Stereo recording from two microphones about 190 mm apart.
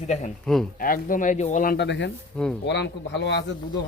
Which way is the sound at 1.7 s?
65° left (ahead or behind).